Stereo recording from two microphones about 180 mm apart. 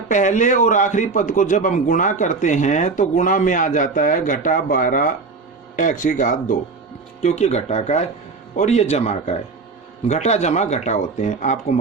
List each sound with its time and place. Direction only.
0.1 s a man's voice: 45° left (ahead or behind)